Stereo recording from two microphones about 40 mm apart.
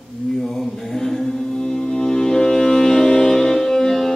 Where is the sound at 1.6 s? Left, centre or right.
Centre.